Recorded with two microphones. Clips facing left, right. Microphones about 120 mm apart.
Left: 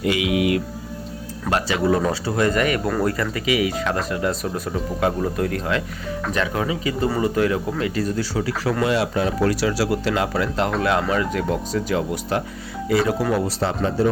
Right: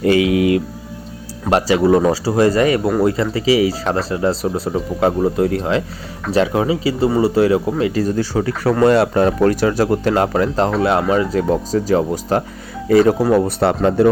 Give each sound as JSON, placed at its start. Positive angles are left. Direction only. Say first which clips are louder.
{"t": 0.0, "sound": "mantra", "louder": "right 6 dB", "side_deg": -40}
{"t": 1.5, "sound": "speech", "louder": "right 7 dB", "side_deg": -30}
{"t": 7.9, "sound": "speech", "louder": "right 5 dB", "side_deg": -40}
{"t": 10.8, "sound": "speech", "louder": "right 5 dB", "side_deg": -30}
{"t": 13.6, "sound": "speech", "louder": "right 7 dB", "side_deg": -65}